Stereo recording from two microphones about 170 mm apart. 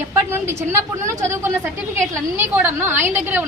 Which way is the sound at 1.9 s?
15° right (ahead or behind).